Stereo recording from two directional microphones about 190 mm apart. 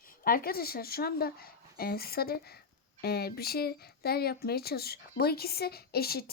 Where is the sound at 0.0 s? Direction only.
50° left (ahead or behind).